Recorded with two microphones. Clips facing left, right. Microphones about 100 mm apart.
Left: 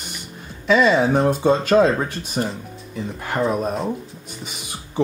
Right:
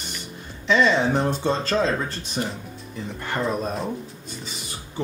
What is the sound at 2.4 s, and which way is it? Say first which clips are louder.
Speech: left 4 dB; 40° left (ahead or behind).